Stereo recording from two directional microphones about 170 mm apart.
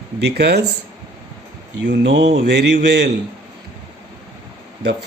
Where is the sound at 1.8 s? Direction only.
90° right.